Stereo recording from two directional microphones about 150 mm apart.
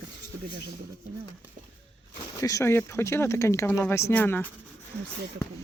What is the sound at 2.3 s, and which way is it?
Speech, 25° left (ahead or behind).